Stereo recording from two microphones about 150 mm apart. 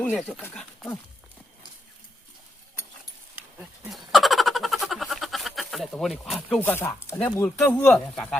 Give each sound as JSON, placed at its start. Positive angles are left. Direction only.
{"t": 0.2, "sound": "speech", "side_deg": 0}
{"t": 4.1, "sound": "a sound", "side_deg": 0}
{"t": 6.6, "sound": "speech", "side_deg": 10}